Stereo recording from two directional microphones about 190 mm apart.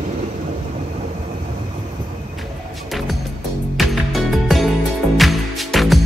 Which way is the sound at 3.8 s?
Centre (ahead or behind).